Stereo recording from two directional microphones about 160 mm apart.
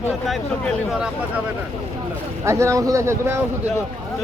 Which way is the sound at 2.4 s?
20° right (ahead or behind).